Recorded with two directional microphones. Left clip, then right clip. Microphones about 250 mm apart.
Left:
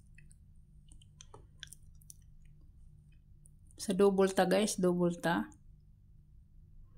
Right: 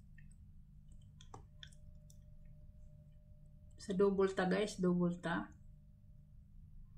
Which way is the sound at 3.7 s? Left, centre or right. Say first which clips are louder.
Left 6 dB; left.